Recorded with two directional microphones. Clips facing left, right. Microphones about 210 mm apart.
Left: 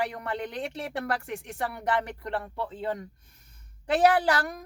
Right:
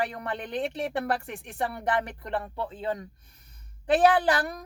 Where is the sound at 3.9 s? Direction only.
20° right (ahead or behind).